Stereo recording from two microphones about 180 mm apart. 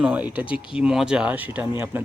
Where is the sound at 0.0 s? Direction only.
10° right (ahead or behind).